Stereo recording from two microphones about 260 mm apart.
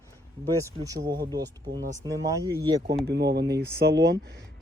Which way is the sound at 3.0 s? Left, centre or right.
Right.